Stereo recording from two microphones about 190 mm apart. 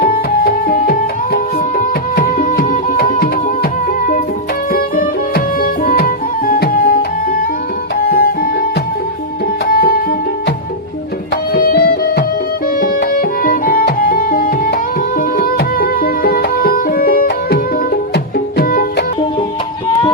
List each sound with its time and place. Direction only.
0.0 s music: 50° left (ahead or behind)
9.6 s music: 50° left (ahead or behind)
11.5 s music: 55° left (ahead or behind)